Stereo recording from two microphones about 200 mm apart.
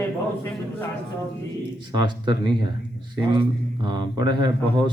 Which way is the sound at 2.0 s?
20° right (ahead or behind).